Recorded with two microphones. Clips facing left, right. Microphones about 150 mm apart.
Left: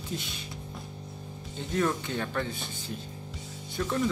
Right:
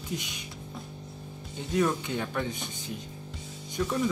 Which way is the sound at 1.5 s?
15° right (ahead or behind).